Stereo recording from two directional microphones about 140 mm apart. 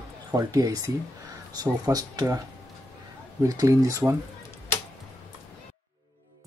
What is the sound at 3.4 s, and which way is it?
Speech, 25° right (ahead or behind).